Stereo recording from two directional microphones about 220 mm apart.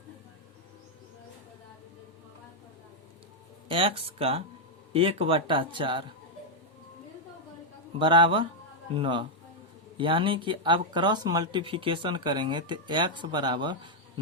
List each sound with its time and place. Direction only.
3.7 s speech: 25° right (ahead or behind)
7.9 s speech: 20° right (ahead or behind)